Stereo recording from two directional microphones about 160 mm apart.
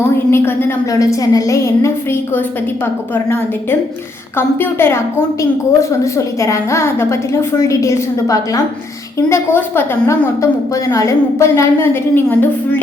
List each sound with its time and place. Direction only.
0.3 s a woman's voice: 15° left (ahead or behind)